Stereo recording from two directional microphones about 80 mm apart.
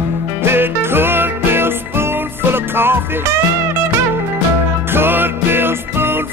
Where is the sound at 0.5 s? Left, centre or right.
Right.